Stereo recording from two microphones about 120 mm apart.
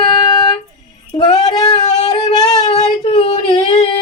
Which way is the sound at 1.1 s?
60° left (ahead or behind).